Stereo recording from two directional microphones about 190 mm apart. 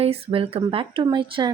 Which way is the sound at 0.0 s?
30° right (ahead or behind).